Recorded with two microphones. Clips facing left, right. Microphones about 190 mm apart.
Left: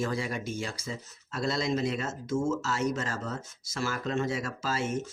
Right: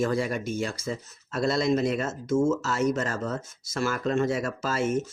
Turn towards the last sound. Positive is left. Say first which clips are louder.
# right 4 dB
turn(degrees=-50)  # may be behind; listen again after turning